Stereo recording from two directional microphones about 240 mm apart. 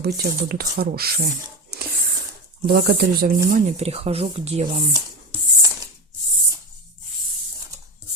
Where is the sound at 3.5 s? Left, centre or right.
Right.